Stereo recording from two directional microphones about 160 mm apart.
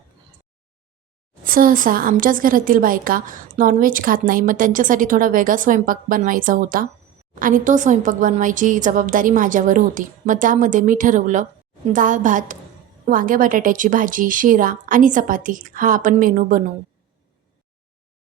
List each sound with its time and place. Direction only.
1.5 s a woman's voice: 60° right (ahead or behind)